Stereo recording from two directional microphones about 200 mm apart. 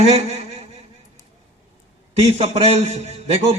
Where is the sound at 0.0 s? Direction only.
30° right (ahead or behind).